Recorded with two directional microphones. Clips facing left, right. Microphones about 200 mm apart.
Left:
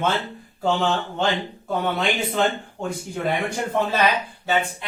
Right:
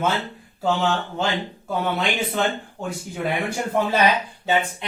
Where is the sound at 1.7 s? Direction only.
Centre (ahead or behind).